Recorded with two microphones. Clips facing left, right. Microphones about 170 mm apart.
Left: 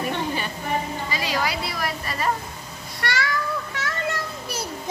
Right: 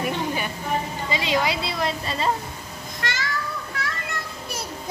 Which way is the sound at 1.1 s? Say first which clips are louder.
Right 4 dB; 25° right (ahead or behind).